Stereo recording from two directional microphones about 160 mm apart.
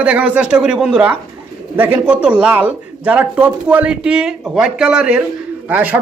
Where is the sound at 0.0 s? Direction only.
10° right (ahead or behind).